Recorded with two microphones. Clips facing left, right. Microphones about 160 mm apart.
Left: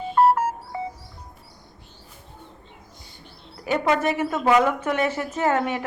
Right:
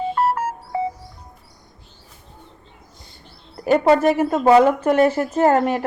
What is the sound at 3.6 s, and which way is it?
Speech, 40° right (ahead or behind).